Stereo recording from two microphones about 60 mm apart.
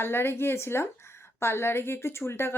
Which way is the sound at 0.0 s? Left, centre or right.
Left.